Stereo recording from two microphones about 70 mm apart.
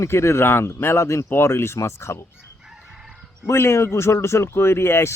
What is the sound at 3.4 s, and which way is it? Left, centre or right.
Speech, left.